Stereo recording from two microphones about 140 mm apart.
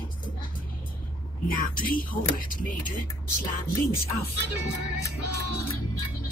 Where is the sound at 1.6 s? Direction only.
85° left.